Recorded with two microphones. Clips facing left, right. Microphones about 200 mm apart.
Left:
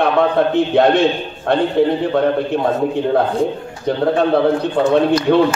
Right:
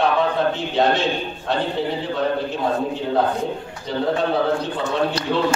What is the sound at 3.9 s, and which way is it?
Speech, 60° left (ahead or behind).